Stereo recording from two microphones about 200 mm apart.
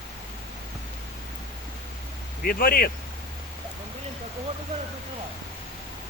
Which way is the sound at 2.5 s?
45° left (ahead or behind).